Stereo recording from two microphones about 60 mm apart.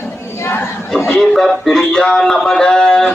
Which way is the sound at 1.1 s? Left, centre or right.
Centre.